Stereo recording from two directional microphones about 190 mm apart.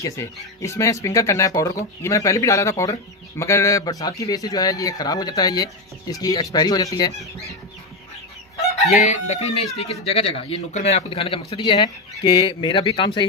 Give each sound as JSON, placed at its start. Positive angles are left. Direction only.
{"t": 0.0, "sound": "speech", "side_deg": 15}
{"t": 8.9, "sound": "chicken", "side_deg": 40}
{"t": 9.8, "sound": "speech", "side_deg": 30}